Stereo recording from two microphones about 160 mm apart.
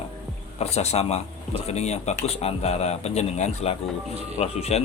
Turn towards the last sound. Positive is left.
turn(degrees=40)  # may be behind; listen again after turning